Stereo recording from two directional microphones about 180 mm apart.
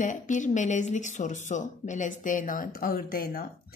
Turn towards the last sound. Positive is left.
turn(degrees=55)  # may be behind; listen again after turning